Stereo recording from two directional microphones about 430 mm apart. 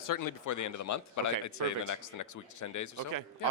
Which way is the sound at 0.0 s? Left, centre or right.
Left.